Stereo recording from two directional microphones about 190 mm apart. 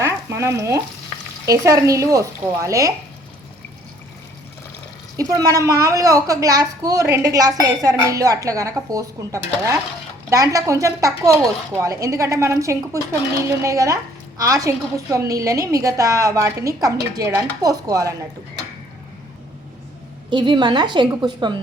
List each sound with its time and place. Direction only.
0.0 s frying: 15° right (ahead or behind)
1.5 s a woman's voice: 15° right (ahead or behind)
5.1 s a woman's voice: 20° right (ahead or behind)
20.3 s a woman's voice: 25° right (ahead or behind)